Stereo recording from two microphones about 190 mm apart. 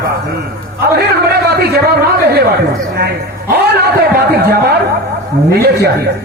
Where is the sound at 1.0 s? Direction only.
55° right (ahead or behind).